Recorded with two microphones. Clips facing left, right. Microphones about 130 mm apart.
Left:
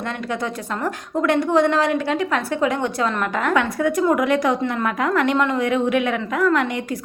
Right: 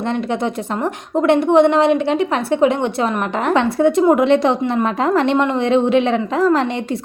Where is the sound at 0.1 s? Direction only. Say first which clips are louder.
Right 7 dB; 25° right (ahead or behind).